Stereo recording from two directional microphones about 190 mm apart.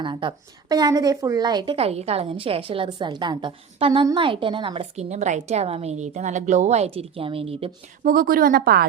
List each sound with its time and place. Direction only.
0.0 s a woman's voice: 25° right (ahead or behind)
8.0 s speech: 45° right (ahead or behind)